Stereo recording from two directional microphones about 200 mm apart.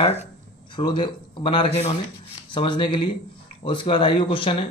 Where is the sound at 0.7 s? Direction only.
20° left (ahead or behind).